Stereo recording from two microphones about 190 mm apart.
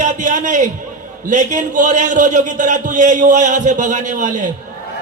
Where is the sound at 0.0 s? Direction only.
40° right (ahead or behind).